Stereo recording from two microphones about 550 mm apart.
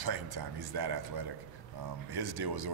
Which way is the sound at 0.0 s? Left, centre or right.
Right.